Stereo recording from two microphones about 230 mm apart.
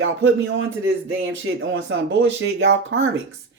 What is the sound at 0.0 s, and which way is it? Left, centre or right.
Speech, right.